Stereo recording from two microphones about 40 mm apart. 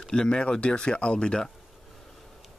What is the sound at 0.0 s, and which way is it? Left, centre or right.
Speech, centre.